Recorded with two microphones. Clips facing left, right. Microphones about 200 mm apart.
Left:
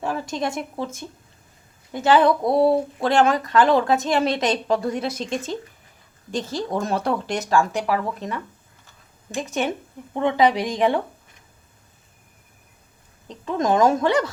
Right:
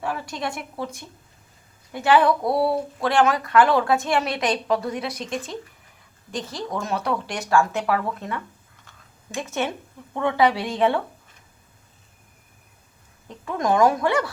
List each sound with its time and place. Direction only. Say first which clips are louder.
0.0 s a sound: left 2 dB; 25° left (ahead or behind)
0.5 s speech: left 3 dB; 25° left (ahead or behind)
13.4 s speech: left 1 dB; 20° left (ahead or behind)